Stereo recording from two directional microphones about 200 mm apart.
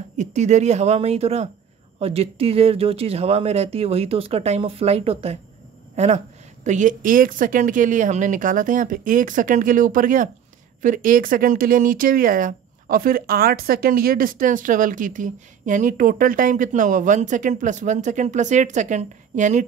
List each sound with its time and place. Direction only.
0.2 s speech: 35° right (ahead or behind)